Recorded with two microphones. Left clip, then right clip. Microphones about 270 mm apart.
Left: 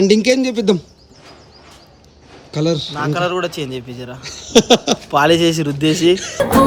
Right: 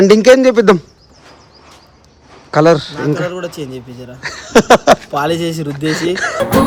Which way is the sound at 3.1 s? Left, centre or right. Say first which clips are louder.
Left 2 dB; left.